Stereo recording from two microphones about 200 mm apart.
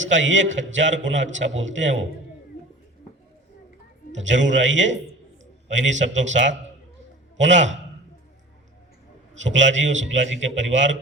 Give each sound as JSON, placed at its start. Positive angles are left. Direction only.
{"t": 0.0, "sound": "a man's voice", "side_deg": -65}
{"t": 4.1, "sound": "a man's voice", "side_deg": -65}
{"t": 9.4, "sound": "a man's voice", "side_deg": -65}